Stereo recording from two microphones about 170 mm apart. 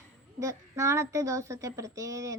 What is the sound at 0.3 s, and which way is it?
Speech, 15° right (ahead or behind).